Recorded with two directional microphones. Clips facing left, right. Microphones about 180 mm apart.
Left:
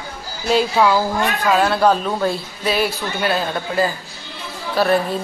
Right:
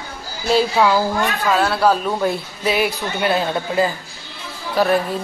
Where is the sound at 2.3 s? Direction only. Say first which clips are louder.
Right 1 dB; 15° right (ahead or behind).